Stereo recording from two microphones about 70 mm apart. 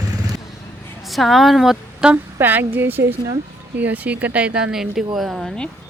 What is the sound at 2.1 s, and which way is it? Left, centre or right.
A woman's voice, right.